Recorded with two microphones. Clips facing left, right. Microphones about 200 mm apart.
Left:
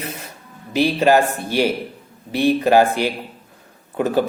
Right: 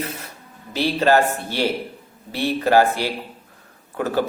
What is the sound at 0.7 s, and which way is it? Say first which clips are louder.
Speech: left 3 dB; 15° left (ahead or behind).